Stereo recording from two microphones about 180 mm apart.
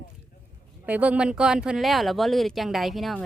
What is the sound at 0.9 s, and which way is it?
Speech, 5° right (ahead or behind).